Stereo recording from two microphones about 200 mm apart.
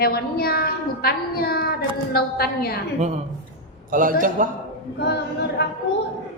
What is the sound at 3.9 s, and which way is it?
Speech, 40° right (ahead or behind).